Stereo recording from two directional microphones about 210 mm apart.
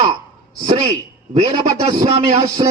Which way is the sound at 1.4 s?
30° right (ahead or behind).